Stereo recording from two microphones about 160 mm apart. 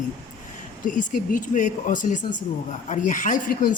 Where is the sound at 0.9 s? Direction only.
55° left (ahead or behind).